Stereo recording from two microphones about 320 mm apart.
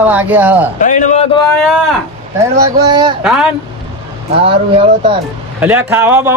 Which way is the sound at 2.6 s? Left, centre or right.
Centre.